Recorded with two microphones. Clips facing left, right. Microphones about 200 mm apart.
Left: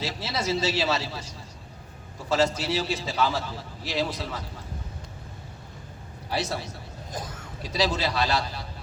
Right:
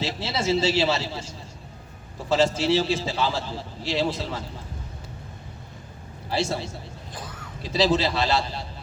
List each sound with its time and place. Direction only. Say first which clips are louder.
0.0 s a man's voice: right 3 dB; 25° right (ahead or behind)
2.3 s a man's voice: right 4 dB; 25° right (ahead or behind)
6.3 s a man's voice: right 3 dB; 25° right (ahead or behind)